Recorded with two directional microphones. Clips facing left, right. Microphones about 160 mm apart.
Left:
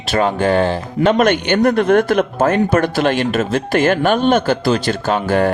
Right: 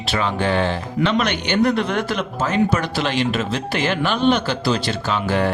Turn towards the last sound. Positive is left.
turn(degrees=50)  # may be behind; listen again after turning